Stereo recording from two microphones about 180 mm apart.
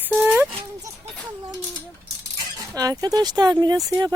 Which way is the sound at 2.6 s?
20° right (ahead or behind).